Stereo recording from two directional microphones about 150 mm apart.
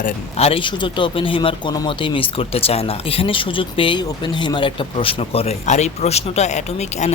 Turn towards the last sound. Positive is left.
turn(degrees=50)  # may be behind; listen again after turning